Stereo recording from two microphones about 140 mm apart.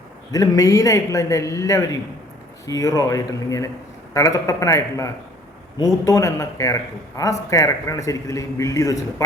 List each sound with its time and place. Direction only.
0.3 s a man's voice: 25° left (ahead or behind)